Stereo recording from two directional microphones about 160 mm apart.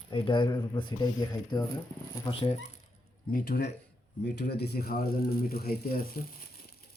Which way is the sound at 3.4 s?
70° left (ahead or behind).